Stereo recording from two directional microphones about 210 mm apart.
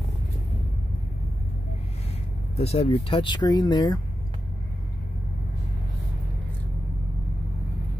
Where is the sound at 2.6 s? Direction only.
30° left (ahead or behind).